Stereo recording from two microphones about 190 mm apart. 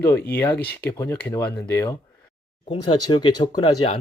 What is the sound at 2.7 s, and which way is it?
Speech, 25° left (ahead or behind).